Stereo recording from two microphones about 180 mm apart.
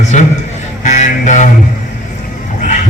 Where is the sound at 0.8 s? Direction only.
45° left (ahead or behind).